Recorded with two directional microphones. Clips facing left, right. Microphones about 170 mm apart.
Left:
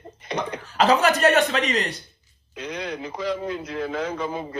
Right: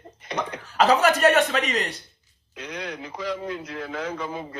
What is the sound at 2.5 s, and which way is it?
Speech, 25° left (ahead or behind).